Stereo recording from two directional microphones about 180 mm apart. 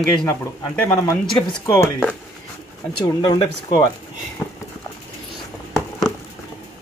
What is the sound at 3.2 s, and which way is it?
Speech, 20° left (ahead or behind).